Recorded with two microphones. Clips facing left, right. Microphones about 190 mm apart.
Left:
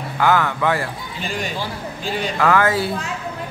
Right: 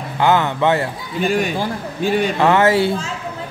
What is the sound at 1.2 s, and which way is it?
A man's voice, 55° right (ahead or behind).